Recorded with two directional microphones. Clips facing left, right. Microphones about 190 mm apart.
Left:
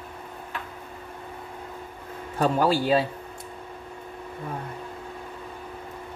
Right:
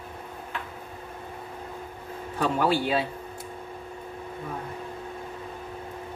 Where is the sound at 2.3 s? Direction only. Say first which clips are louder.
Left 2 dB; 40° left (ahead or behind).